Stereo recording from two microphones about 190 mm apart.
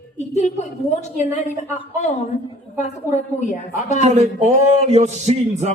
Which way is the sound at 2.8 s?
35° left (ahead or behind).